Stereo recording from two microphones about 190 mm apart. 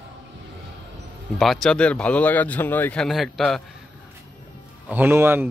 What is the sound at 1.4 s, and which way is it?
Speech, centre (ahead or behind).